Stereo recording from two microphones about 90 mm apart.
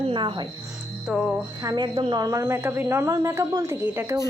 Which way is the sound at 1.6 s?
55° right (ahead or behind).